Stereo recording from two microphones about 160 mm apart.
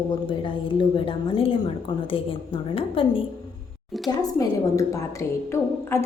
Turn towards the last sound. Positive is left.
turn(degrees=15)  # may be behind; listen again after turning